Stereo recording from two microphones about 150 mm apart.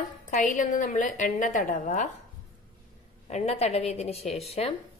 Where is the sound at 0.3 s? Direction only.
60° left (ahead or behind).